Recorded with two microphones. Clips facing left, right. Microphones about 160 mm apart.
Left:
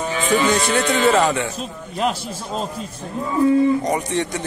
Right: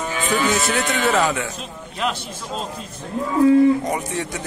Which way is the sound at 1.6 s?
40° left (ahead or behind).